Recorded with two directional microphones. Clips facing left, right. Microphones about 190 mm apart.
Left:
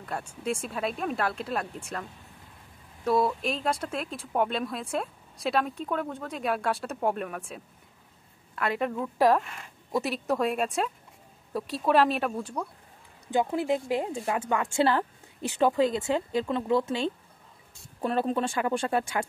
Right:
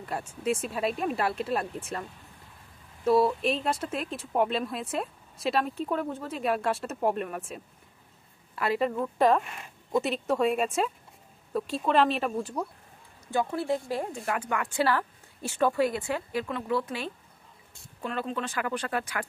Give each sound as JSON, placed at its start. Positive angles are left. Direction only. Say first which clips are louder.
{"t": 0.4, "sound": "speech", "louder": "right 2 dB", "side_deg": -5}
{"t": 3.0, "sound": "speech", "louder": "right 2 dB", "side_deg": 0}
{"t": 13.3, "sound": "speech", "louder": "left 2 dB", "side_deg": 20}
{"t": 18.0, "sound": "speech", "louder": "left 5 dB", "side_deg": 35}